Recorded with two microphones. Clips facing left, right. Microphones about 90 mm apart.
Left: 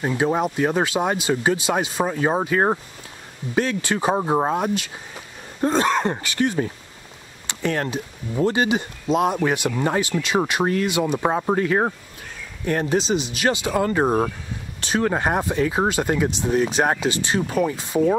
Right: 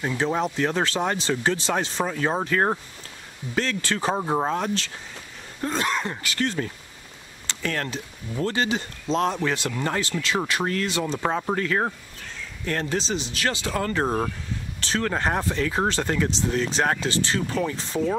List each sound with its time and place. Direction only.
0.0 s speech: 15° left (ahead or behind)
5.6 s speech: 35° left (ahead or behind)
6.2 s speech: 15° left (ahead or behind)